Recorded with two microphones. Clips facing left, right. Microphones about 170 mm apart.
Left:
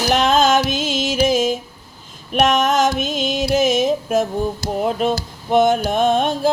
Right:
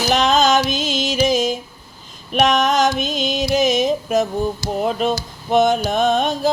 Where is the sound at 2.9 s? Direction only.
50° left (ahead or behind).